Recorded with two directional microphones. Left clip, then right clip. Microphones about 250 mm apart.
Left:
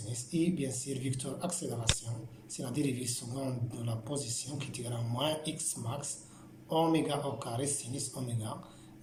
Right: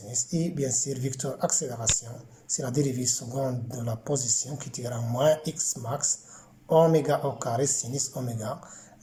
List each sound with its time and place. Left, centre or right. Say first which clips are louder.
0.1 s speech: right 3 dB; right